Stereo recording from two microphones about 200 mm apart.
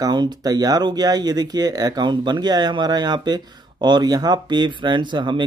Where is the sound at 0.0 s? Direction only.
20° right (ahead or behind).